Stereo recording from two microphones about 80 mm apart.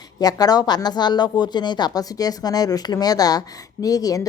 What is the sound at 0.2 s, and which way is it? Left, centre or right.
Speech, left.